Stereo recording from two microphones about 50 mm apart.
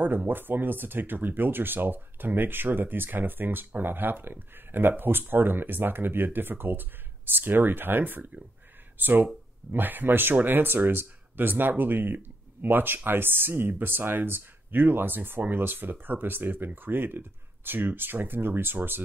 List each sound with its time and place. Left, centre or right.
0.0 s speech: right